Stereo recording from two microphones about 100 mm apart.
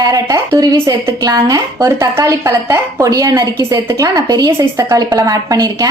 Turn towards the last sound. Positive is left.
turn(degrees=-40)  # may be behind; listen again after turning